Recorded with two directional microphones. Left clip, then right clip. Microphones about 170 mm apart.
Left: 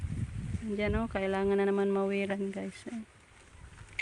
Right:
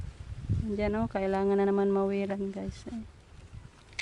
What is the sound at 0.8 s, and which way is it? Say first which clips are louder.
Speech: right 2 dB; 5° right (ahead or behind).